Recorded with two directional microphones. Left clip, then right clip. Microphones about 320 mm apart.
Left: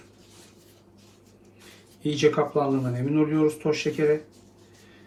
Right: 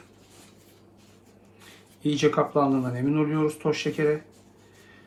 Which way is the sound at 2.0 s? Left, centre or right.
Centre.